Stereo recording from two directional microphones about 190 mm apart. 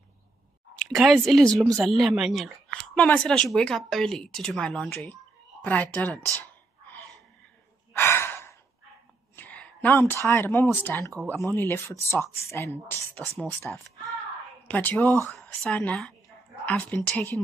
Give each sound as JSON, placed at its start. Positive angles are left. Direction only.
{"t": 0.8, "sound": "a woman's voice", "side_deg": 0}
{"t": 1.5, "sound": "speech", "side_deg": -20}
{"t": 1.9, "sound": "a woman's voice", "side_deg": 0}
{"t": 7.9, "sound": "sigh", "side_deg": 15}
{"t": 9.3, "sound": "speech", "side_deg": 10}
{"t": 11.3, "sound": "a woman's voice", "side_deg": 0}
{"t": 12.3, "sound": "speech", "side_deg": 10}